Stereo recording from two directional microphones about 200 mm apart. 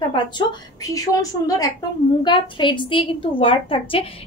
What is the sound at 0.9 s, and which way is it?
A woman's voice, 15° left (ahead or behind).